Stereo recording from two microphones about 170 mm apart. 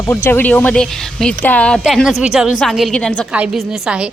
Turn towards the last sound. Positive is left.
turn(degrees=-5)  # may be behind; listen again after turning